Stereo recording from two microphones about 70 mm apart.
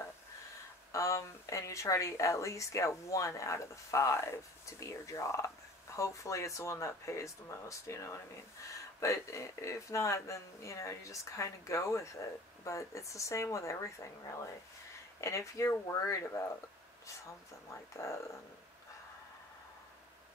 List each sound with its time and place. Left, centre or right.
0.9 s a woman's voice: left